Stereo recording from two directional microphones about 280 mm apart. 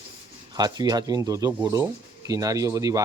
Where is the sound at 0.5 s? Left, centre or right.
Centre.